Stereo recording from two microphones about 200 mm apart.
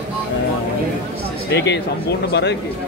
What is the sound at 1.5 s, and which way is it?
Speech, 60° left (ahead or behind).